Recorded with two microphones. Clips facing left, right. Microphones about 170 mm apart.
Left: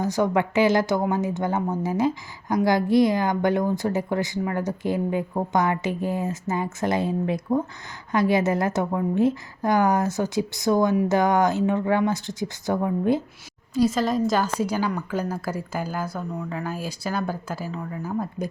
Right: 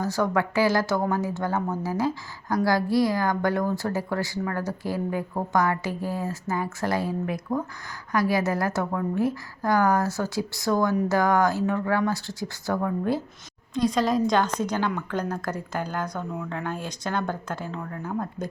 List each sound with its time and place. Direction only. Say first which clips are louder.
0.0 s a woman's voice: left 2 dB; 20° left (ahead or behind)
13.7 s a woman's voice: left 1 dB; 5° left (ahead or behind)